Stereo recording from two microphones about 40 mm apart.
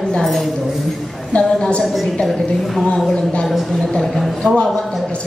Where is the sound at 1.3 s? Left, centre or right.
Left.